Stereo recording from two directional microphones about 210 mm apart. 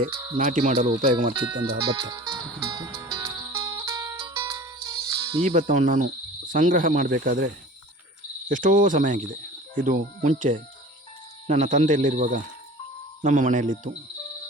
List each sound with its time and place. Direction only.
0.1 s speech: 15° right (ahead or behind)
0.3 s speech: 40° right (ahead or behind)
1.3 s speech: 20° right (ahead or behind)
2.7 s music: 15° right (ahead or behind)
5.4 s speech: 35° right (ahead or behind)